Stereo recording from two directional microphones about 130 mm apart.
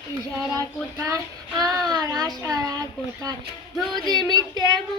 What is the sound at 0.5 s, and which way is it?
Child singing, 25° right (ahead or behind).